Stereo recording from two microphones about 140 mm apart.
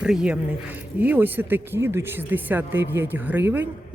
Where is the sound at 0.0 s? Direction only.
5° right (ahead or behind).